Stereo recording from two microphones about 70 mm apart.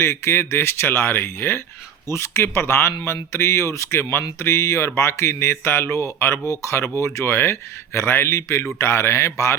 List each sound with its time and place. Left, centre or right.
0.0 s speech: left